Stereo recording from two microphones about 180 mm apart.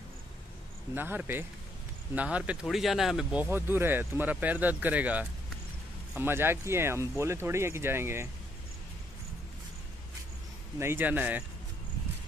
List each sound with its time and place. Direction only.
0.9 s speech: 10° right (ahead or behind)
10.8 s speech: 10° right (ahead or behind)